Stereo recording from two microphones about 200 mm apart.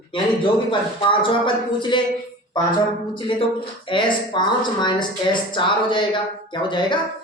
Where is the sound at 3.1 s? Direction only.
25° left (ahead or behind).